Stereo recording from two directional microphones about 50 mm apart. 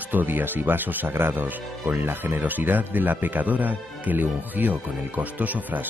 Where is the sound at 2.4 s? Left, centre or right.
Right.